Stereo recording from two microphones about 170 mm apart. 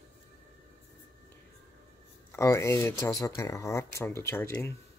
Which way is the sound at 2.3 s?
15° left (ahead or behind).